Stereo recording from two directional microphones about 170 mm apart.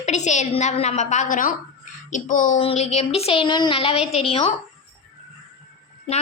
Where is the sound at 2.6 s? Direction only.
35° left (ahead or behind).